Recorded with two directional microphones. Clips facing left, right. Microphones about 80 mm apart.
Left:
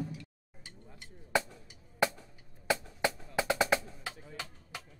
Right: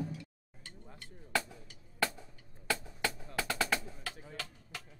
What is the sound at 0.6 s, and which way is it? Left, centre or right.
Music, centre.